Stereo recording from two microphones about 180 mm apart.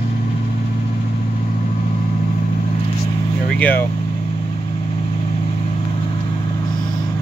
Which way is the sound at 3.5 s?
10° left (ahead or behind).